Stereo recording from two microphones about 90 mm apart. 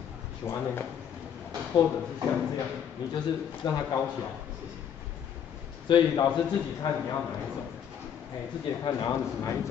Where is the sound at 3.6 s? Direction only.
55° left (ahead or behind).